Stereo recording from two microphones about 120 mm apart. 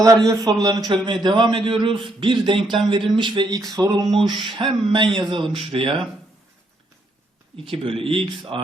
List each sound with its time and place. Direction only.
0.0 s a man's voice: 30° right (ahead or behind)
3.7 s a man's voice: 30° right (ahead or behind); by 6.0 s 50° right (ahead or behind)
7.5 s speech: 50° right (ahead or behind)